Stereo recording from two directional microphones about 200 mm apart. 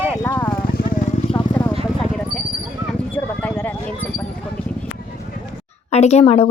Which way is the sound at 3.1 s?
5° left (ahead or behind).